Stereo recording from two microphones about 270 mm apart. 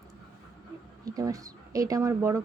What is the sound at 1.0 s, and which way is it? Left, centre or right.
Speech, centre.